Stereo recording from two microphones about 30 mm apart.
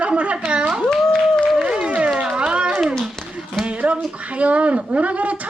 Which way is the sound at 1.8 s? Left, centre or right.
Right.